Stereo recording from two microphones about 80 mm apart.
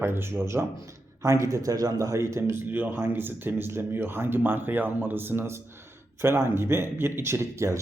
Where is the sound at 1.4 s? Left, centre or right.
Right.